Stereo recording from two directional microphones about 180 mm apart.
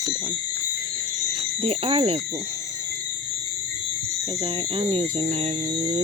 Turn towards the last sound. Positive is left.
turn(degrees=-40)  # may be behind; listen again after turning